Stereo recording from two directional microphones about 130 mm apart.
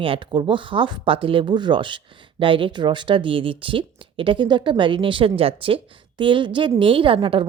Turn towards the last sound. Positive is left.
turn(degrees=-40)  # may be behind; listen again after turning